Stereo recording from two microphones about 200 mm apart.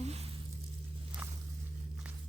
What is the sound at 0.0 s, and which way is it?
Squish, 30° right (ahead or behind).